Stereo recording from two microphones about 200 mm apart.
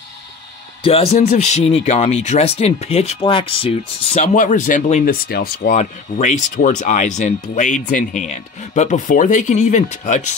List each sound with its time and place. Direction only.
0.8 s speech: 30° left (ahead or behind)
5.3 s speech: 50° left (ahead or behind)